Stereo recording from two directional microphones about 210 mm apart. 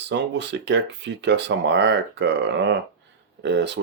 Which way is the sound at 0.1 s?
55° right (ahead or behind).